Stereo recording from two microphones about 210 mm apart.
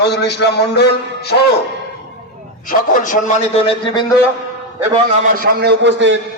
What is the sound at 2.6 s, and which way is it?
Speech, 40° left (ahead or behind).